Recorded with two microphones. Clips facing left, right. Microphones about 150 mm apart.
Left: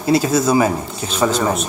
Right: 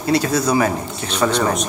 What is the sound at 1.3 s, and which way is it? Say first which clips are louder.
Speech: even; 5° left (ahead or behind).